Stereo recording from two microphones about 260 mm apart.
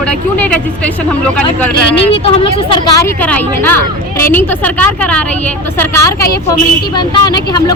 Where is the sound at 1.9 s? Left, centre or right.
Left.